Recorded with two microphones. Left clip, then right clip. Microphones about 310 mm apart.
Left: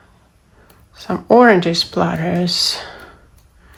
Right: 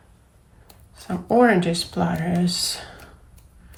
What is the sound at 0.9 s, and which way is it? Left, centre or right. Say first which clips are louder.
Speech: left 7 dB; centre.